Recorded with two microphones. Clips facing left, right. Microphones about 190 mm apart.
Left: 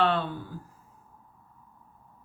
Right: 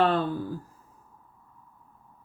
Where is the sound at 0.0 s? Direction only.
40° right (ahead or behind).